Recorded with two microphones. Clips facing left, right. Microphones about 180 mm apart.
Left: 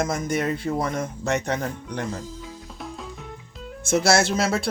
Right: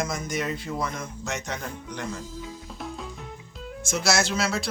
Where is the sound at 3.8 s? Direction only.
55° left (ahead or behind).